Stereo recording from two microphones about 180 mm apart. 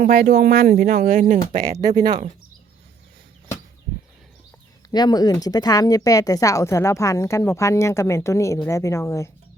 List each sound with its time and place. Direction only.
0.0 s speech: 55° right (ahead or behind)
4.9 s speech: 20° left (ahead or behind)